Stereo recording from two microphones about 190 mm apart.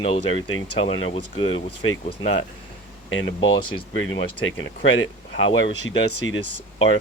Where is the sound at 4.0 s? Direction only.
90° left.